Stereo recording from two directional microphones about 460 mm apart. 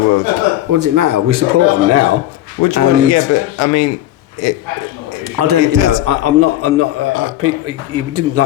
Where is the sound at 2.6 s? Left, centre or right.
Left.